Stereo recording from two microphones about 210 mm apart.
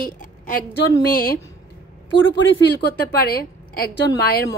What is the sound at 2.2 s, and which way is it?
Speech, 60° left (ahead or behind).